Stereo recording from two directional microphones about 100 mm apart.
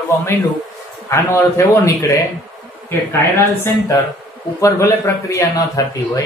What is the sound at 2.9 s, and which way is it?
Speech, 25° left (ahead or behind).